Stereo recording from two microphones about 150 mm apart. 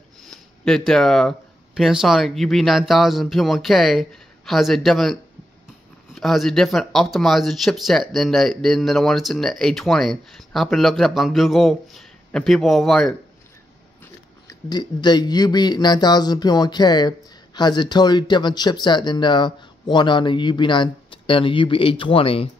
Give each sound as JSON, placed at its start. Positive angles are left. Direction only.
{"t": 0.2, "sound": "a sound", "side_deg": 5}
{"t": 1.8, "sound": "speech", "side_deg": -5}
{"t": 14.5, "sound": "speech", "side_deg": 30}